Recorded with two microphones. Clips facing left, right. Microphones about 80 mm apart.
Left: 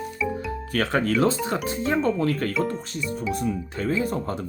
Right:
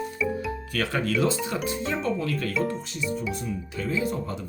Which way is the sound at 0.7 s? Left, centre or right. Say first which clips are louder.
Left 4 dB; left.